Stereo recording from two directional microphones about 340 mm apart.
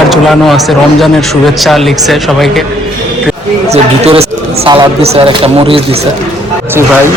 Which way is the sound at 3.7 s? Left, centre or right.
Centre.